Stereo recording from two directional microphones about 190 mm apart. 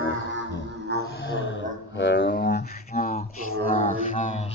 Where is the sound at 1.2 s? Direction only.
80° left.